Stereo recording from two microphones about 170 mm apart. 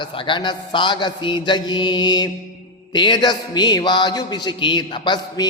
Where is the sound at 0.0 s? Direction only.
30° left (ahead or behind).